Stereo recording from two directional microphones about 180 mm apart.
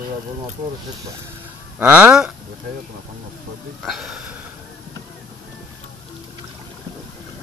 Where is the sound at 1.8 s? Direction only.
5° right (ahead or behind).